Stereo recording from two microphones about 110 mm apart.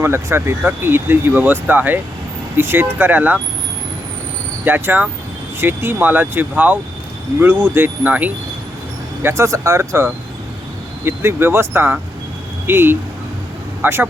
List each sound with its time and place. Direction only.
0.0 s speech: 20° right (ahead or behind)
4.6 s speech: 15° right (ahead or behind)
9.2 s speech: 25° right (ahead or behind)